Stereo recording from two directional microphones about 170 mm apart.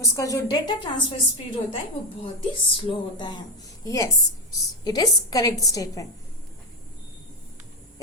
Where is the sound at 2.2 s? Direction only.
30° left (ahead or behind).